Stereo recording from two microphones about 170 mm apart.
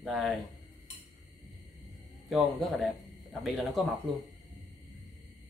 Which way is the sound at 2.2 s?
Centre (ahead or behind).